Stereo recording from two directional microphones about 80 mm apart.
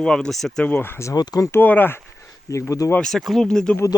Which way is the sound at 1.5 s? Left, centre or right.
Left.